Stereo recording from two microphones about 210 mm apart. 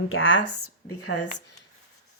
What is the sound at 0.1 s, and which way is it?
Speech, 65° left (ahead or behind).